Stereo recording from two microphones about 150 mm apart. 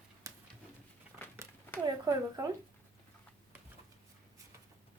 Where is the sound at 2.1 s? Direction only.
25° right (ahead or behind).